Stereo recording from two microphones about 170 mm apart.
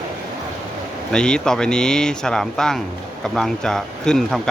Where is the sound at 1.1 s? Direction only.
5° left (ahead or behind).